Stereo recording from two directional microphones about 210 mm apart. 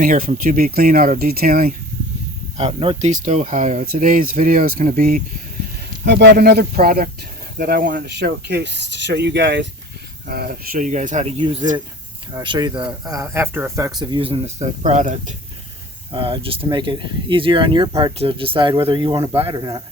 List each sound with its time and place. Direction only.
0.0 s speech: 40° right (ahead or behind)
2.6 s speech: 25° right (ahead or behind); by 5.2 s 40° right (ahead or behind)
6.1 s speech: 50° right (ahead or behind); by 11.8 s 30° right (ahead or behind)
12.3 s speech: 20° right (ahead or behind)
14.0 s speech: 25° right (ahead or behind)
16.1 s speech: 25° right (ahead or behind)